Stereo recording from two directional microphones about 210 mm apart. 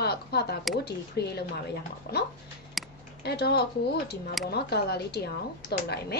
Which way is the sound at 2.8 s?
Centre (ahead or behind).